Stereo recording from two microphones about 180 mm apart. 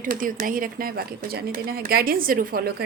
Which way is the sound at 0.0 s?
50° right (ahead or behind).